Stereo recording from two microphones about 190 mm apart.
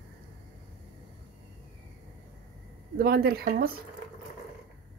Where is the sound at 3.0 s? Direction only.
55° right (ahead or behind).